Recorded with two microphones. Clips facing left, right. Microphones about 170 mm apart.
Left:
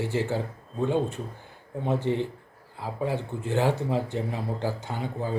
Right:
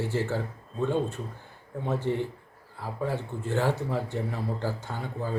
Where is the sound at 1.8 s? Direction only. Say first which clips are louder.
Left 2 dB; 20° left (ahead or behind).